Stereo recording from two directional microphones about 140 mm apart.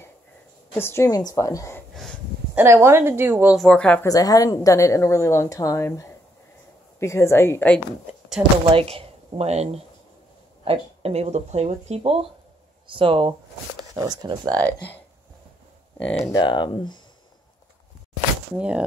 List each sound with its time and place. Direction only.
0.7 s a woman's voice: 15° left (ahead or behind)
2.5 s speech: 20° right (ahead or behind)
3.5 s speech: 5° left (ahead or behind)
4.0 s a woman's voice: 25° left (ahead or behind)
8.7 s speech: 45° right (ahead or behind)
14.6 s speech: 15° left (ahead or behind)
16.3 s speech: 30° left (ahead or behind)
18.5 s speech: 10° right (ahead or behind)